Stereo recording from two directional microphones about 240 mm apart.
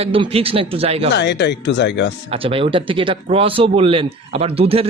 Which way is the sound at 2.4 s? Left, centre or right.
Right.